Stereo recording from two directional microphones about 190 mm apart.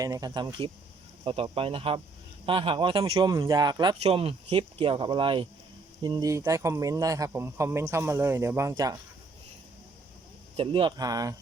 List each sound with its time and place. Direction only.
0.0 s speech: 20° right (ahead or behind)
10.6 s speech: 25° right (ahead or behind)